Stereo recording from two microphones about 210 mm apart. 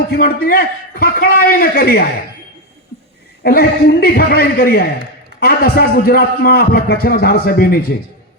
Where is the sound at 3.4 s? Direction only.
45° left (ahead or behind).